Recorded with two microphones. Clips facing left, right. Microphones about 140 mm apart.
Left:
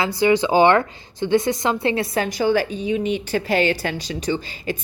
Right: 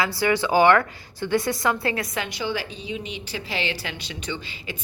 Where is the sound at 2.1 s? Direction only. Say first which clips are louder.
Left 9 dB; 45° left (ahead or behind).